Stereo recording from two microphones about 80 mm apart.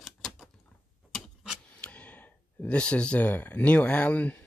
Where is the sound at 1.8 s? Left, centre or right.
Centre.